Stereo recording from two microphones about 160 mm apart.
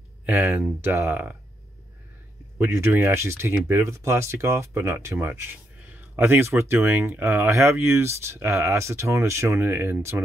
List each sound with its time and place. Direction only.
0.3 s speech: 10° right (ahead or behind)
2.6 s speech: 15° right (ahead or behind)